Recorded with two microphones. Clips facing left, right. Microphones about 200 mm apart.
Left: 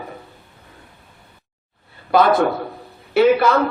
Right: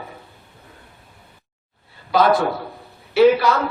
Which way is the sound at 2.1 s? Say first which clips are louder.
Left 2 dB; 55° left (ahead or behind).